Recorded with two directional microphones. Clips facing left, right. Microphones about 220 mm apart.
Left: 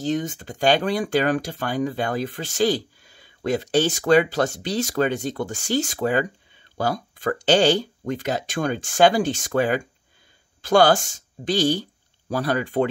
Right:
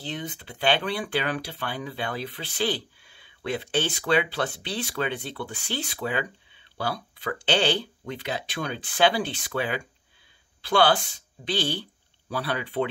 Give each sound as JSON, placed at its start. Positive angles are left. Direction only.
{"t": 0.0, "sound": "speech", "side_deg": 45}